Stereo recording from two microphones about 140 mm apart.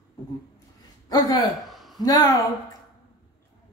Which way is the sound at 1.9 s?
25° left (ahead or behind).